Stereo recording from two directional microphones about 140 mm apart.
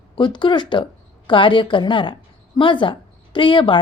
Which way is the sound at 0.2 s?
35° left (ahead or behind).